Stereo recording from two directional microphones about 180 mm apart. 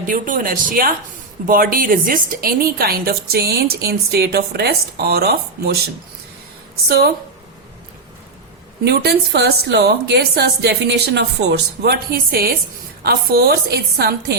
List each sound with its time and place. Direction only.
0.1 s a woman's voice: 50° right (ahead or behind)
6.8 s a woman's voice: 60° right (ahead or behind)
8.8 s a woman's voice: 60° right (ahead or behind)